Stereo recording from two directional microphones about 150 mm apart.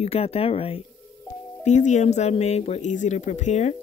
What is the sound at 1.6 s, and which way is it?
Speech, 50° left (ahead or behind).